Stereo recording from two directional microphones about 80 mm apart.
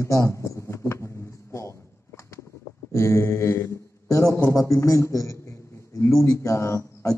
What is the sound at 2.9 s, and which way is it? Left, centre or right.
A man's voice, left.